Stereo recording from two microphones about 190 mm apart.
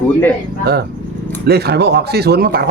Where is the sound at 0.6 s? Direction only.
55° right (ahead or behind).